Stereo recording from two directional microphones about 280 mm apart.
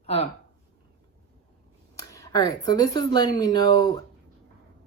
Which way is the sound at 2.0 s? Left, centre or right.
Centre.